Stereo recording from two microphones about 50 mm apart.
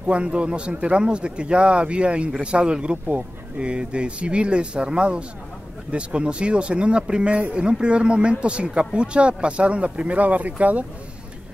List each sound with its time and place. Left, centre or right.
0.0 s speech: right